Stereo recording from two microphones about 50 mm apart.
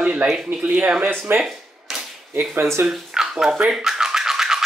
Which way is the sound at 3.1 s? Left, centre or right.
Centre.